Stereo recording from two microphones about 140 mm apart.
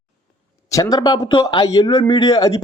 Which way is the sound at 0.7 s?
25° left (ahead or behind).